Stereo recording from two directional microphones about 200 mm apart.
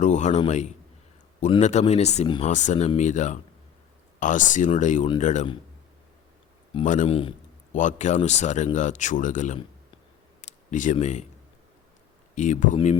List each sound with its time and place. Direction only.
0.0 s speech: 35° left (ahead or behind)
6.8 s speech: 40° left (ahead or behind)
12.3 s speech: 35° left (ahead or behind)